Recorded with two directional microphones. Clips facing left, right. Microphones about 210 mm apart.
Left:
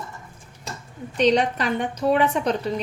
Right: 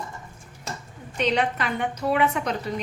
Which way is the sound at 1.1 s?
35° left (ahead or behind).